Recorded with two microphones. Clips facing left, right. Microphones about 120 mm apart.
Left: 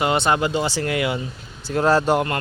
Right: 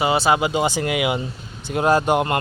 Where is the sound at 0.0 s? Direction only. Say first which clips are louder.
Right 1 dB; 5° right (ahead or behind).